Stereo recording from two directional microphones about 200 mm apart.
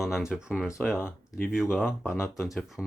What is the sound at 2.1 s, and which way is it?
Speech, 10° left (ahead or behind).